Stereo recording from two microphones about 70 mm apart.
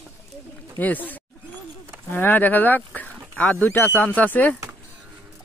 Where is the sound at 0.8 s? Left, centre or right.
Left.